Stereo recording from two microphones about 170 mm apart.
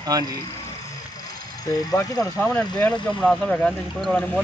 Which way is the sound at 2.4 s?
5° left (ahead or behind).